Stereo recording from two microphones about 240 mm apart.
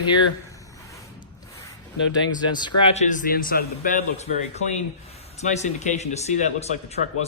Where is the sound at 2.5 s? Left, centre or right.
Centre; by 4.3 s left.